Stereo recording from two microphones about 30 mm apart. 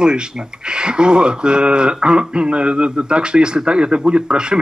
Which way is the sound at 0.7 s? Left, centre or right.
Right.